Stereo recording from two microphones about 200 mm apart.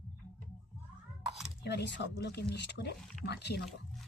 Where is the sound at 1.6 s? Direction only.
60° left (ahead or behind).